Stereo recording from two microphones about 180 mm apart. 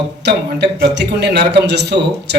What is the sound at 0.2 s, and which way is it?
A man's voice, 70° right (ahead or behind).